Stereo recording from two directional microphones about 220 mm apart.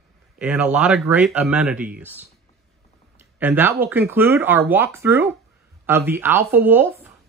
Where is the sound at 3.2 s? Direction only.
10° right (ahead or behind).